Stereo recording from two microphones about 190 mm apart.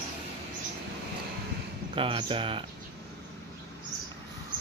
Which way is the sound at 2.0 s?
30° right (ahead or behind).